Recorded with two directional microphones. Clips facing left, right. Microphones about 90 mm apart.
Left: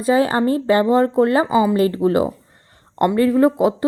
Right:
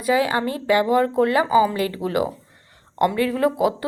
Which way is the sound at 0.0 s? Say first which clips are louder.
Left 4 dB; 35° left (ahead or behind).